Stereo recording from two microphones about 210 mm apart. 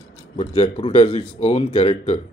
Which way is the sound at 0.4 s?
25° left (ahead or behind).